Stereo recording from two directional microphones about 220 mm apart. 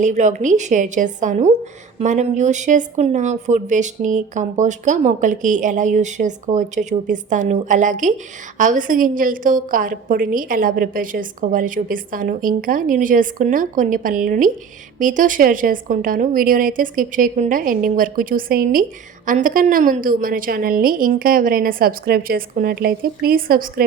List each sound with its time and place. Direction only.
0.0 s a woman's voice: 35° right (ahead or behind)